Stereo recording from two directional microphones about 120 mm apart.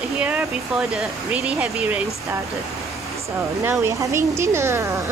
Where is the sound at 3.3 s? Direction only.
25° right (ahead or behind).